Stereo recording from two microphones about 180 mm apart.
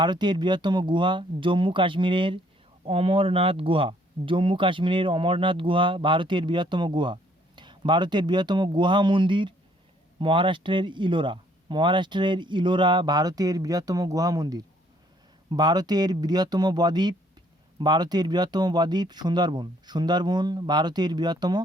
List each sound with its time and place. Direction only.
0.0 s speech: 25° right (ahead or behind)